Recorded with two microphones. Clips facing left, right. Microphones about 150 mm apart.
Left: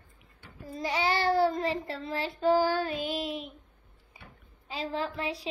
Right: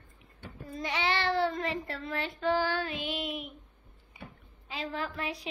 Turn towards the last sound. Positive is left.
turn(degrees=30)  # may be behind; listen again after turning